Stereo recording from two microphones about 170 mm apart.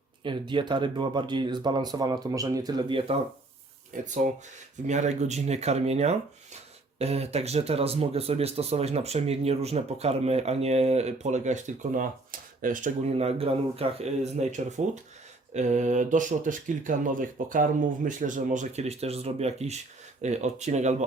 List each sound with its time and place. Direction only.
0.2 s speech: 30° right (ahead or behind)
4.0 s speech: 45° right (ahead or behind)